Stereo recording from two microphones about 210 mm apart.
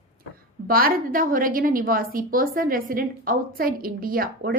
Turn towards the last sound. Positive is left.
turn(degrees=-45)  # may be behind; listen again after turning